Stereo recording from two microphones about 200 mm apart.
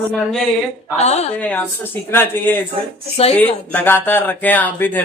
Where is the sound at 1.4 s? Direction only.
10° left (ahead or behind).